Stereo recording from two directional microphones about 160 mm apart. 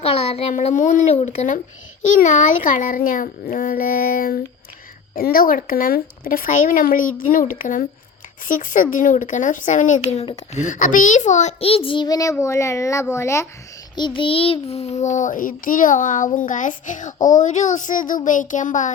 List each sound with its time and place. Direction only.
0.0 s child singing: 40° left (ahead or behind); by 4.4 s 65° left (ahead or behind)
5.1 s speech: 65° left (ahead or behind)
8.4 s child singing: 55° left (ahead or behind)
10.5 s a child's voice: 50° left (ahead or behind); by 13.5 s 15° left (ahead or behind)
13.9 s child singing: 30° left (ahead or behind); by 18.9 s 50° left (ahead or behind)